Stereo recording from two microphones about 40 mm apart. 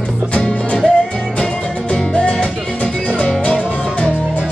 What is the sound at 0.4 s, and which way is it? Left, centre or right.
Music, centre.